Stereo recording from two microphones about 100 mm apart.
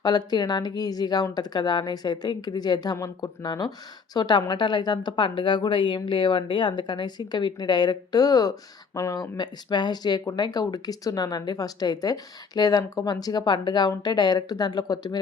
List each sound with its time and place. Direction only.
0.0 s speech: 45° left (ahead or behind)